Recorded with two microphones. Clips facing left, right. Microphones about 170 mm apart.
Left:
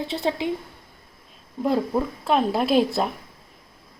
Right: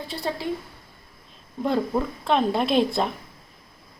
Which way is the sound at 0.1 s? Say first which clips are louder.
Left 2 dB; 20° left (ahead or behind).